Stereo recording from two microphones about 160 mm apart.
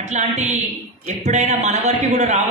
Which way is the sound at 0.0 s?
45° right (ahead or behind).